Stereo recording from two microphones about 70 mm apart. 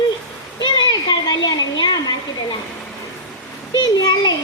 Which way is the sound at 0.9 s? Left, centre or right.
Left.